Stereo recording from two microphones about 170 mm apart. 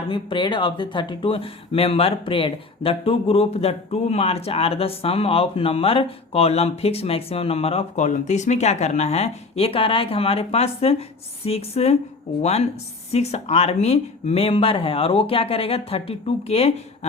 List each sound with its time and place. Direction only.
0.1 s speech: 30° left (ahead or behind)